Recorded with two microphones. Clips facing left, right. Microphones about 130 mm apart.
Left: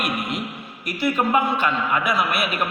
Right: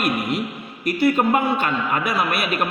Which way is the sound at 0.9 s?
45° right (ahead or behind).